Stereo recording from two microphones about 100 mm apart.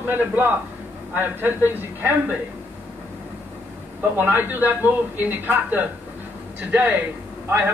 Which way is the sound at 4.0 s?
20° right (ahead or behind).